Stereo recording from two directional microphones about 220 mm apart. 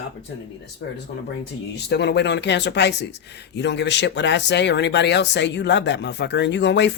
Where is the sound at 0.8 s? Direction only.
55° left (ahead or behind).